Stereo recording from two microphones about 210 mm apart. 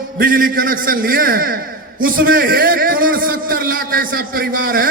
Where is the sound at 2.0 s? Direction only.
45° right (ahead or behind).